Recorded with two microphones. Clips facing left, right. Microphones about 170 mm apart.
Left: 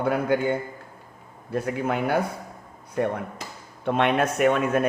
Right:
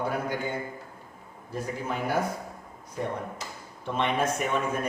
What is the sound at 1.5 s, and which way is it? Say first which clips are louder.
A man's voice: left 7 dB; 70° left (ahead or behind).